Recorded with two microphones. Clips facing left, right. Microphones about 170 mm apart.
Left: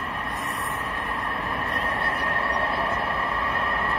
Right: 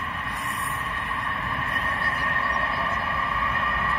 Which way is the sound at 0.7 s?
40° left (ahead or behind).